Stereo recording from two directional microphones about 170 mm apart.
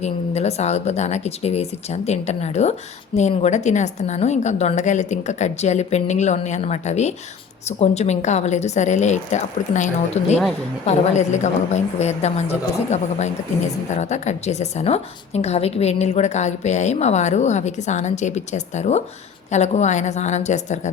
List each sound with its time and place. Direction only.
0.0 s a woman's voice: 40° left (ahead or behind)